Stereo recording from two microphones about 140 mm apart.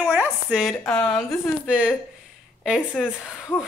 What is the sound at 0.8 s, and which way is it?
Speech, 5° left (ahead or behind).